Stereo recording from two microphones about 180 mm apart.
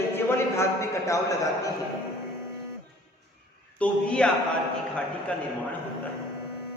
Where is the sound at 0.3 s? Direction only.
15° left (ahead or behind).